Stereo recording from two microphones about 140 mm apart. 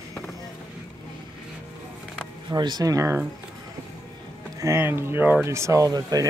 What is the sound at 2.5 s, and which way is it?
Speech, 30° right (ahead or behind).